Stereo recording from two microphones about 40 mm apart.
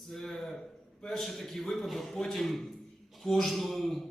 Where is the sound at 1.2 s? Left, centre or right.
Centre.